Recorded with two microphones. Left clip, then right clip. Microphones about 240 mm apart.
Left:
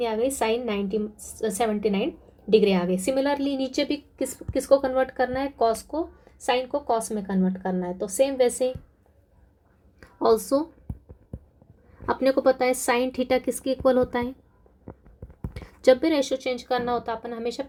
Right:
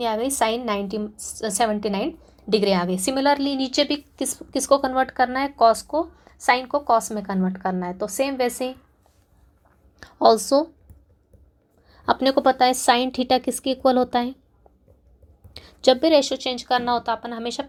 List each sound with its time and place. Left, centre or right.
0.0 s a woman's voice: centre
10.0 s a woman's voice: centre
12.0 s a woman's voice: centre
15.8 s a woman's voice: centre